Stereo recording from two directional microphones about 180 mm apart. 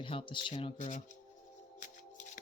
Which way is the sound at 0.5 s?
40° left (ahead or behind).